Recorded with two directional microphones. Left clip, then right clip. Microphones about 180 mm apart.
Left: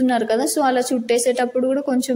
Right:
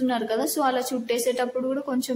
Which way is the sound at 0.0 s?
25° left (ahead or behind).